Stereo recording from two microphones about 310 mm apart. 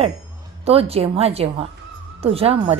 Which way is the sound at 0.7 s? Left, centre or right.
Centre.